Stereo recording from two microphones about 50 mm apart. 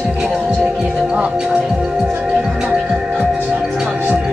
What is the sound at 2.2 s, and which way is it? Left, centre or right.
Music, right.